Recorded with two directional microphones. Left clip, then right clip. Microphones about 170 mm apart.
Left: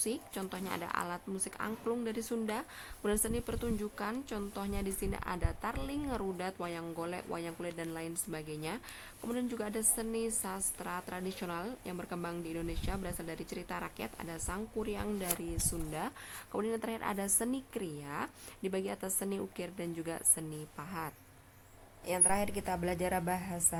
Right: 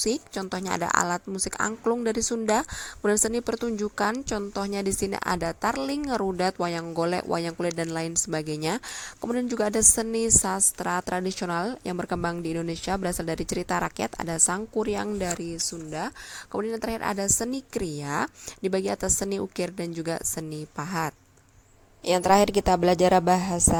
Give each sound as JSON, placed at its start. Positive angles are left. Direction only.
{"t": 0.0, "sound": "a woman's voice", "side_deg": -40}
{"t": 15.5, "sound": "speech", "side_deg": -25}
{"t": 17.7, "sound": "a woman's voice", "side_deg": -40}